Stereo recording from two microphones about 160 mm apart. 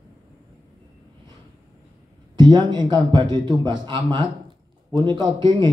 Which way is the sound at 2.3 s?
25° right (ahead or behind).